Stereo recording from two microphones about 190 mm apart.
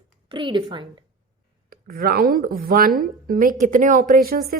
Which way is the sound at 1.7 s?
50° right (ahead or behind).